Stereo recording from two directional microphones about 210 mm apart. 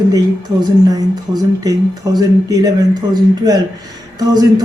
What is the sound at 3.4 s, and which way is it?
Speech, 20° right (ahead or behind).